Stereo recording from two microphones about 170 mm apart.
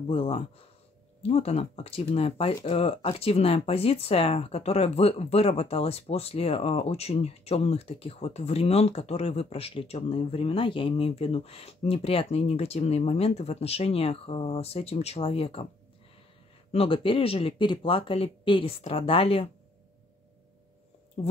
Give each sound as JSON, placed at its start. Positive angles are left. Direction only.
{"t": 0.1, "sound": "speech", "side_deg": 35}
{"t": 16.7, "sound": "speech", "side_deg": 35}